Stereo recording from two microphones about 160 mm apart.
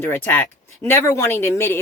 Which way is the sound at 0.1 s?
10° left (ahead or behind).